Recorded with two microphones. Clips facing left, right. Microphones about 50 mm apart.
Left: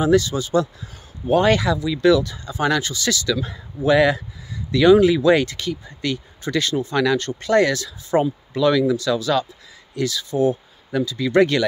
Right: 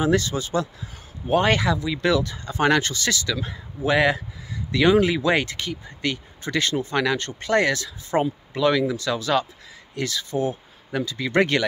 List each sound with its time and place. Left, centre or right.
0.0 s speech: right